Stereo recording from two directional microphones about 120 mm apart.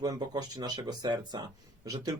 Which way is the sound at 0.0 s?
30° right (ahead or behind).